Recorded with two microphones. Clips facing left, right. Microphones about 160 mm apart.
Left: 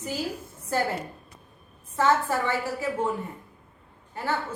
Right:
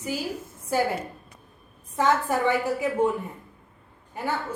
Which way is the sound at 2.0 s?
15° right (ahead or behind).